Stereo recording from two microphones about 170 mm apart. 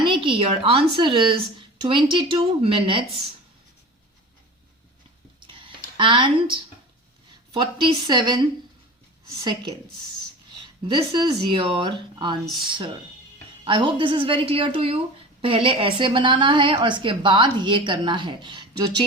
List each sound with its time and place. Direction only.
0.0 s a woman's voice: 30° right (ahead or behind)
5.5 s a sound: 30° right (ahead or behind)
7.3 s a woman's voice: 25° right (ahead or behind)
10.8 s a woman's voice: 25° right (ahead or behind)